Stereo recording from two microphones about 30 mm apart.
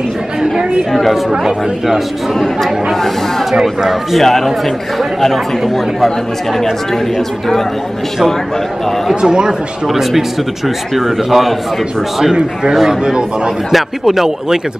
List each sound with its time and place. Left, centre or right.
2.3 s speech: centre
7.2 s speech: centre
9.1 s a man's voice: right
9.8 s a man's voice: centre
11.2 s a man's voice: centre
14.0 s a man's voice: centre